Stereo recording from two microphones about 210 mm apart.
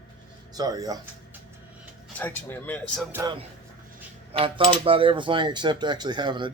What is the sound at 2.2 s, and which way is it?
Speech, 10° left (ahead or behind).